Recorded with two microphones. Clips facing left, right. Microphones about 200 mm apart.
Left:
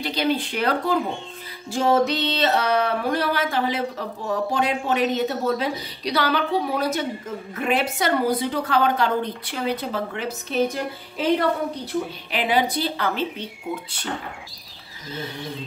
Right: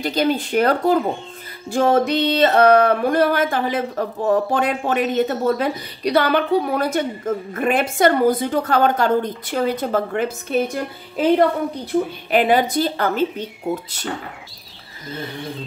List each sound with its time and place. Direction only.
0.0 s music: 45° right (ahead or behind)